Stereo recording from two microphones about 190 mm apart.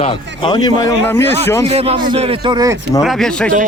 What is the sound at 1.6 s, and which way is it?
Speech, 30° right (ahead or behind).